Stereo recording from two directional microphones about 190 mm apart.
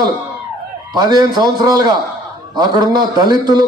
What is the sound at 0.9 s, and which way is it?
A man's voice, 20° right (ahead or behind).